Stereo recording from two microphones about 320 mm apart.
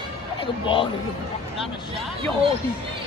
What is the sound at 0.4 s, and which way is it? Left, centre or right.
Speech, centre.